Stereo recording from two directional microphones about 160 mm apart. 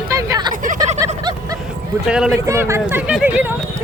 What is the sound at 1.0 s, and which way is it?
Vehicle, 20° right (ahead or behind).